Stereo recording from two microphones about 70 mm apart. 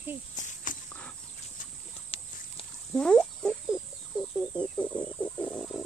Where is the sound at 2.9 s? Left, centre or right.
Centre.